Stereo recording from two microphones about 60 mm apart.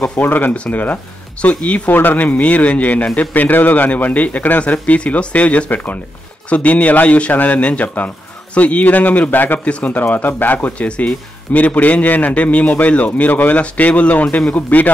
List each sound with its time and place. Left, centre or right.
0.2 s speech: left